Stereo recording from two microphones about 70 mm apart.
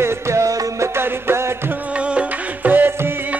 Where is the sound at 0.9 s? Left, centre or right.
Right.